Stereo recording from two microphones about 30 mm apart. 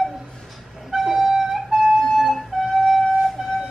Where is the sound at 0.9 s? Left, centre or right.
Centre.